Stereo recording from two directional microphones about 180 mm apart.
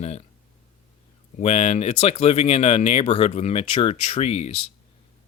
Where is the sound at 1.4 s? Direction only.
35° left (ahead or behind).